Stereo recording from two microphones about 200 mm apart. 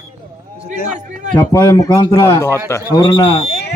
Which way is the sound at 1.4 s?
10° left (ahead or behind).